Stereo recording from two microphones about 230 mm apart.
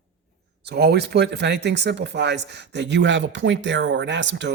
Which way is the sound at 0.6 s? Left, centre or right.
Right.